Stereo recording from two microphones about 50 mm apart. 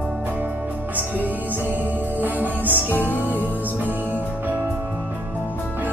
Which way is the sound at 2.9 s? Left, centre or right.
Left.